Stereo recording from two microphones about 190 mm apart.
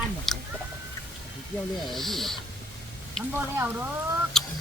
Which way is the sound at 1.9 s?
Centre (ahead or behind).